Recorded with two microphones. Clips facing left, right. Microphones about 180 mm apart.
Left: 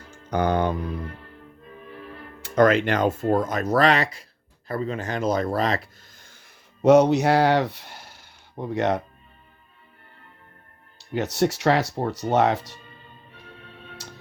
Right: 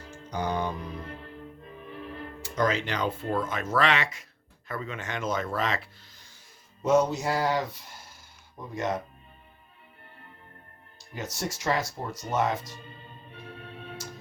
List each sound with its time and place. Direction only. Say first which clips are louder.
0.3 s speech: left 8 dB; 60° left (ahead or behind)
2.4 s speech: left 9 dB; 55° left (ahead or behind)
6.8 s speech: left 8 dB; 70° left (ahead or behind)
10.9 s speech: left 11 dB; 70° left (ahead or behind)